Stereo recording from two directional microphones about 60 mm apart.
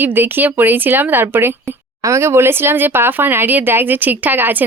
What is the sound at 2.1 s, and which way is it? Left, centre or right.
A woman's voice, right.